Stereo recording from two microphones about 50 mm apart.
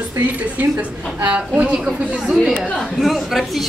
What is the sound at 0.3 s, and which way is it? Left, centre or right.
A woman's voice, right.